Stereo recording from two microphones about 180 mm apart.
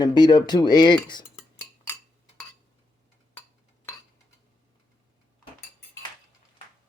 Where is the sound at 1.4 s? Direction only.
15° left (ahead or behind).